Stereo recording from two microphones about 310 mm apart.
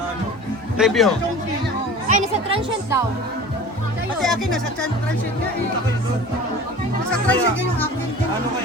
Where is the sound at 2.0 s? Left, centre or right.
Right.